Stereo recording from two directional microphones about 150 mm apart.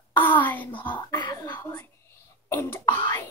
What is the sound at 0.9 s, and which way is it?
Cough, 30° left (ahead or behind).